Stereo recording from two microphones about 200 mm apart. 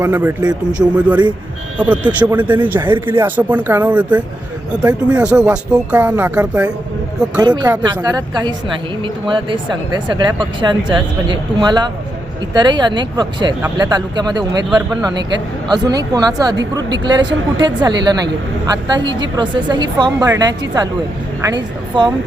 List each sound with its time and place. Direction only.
0.0 s speech: 10° right (ahead or behind)
7.4 s speech: 20° right (ahead or behind)